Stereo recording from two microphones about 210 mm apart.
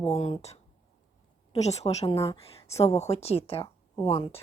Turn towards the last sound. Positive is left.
turn(degrees=30)  # may be behind; listen again after turning